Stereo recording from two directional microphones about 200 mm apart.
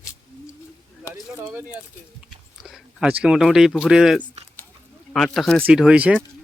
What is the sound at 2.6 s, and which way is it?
Speech, 5° right (ahead or behind).